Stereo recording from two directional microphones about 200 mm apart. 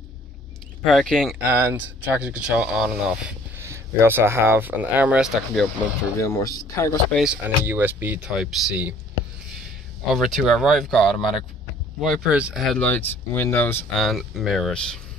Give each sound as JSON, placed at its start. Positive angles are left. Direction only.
{"t": 0.8, "sound": "speech", "side_deg": 0}
{"t": 1.5, "sound": "speech", "side_deg": -10}
{"t": 6.2, "sound": "speech", "side_deg": 15}
{"t": 7.1, "sound": "speech", "side_deg": 0}
{"t": 10.1, "sound": "speech", "side_deg": 0}
{"t": 14.0, "sound": "speech", "side_deg": 0}